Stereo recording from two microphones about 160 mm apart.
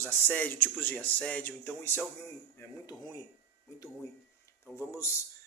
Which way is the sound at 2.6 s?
25° left (ahead or behind).